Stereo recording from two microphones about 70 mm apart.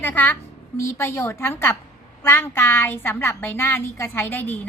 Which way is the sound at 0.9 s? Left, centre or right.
Left.